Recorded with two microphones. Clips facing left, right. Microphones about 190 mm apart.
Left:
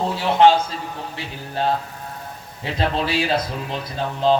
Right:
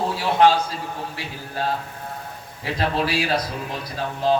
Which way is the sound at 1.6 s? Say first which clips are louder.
Left 4 dB; 25° left (ahead or behind).